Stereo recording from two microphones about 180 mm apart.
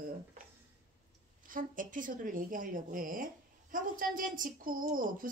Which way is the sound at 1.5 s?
50° right (ahead or behind).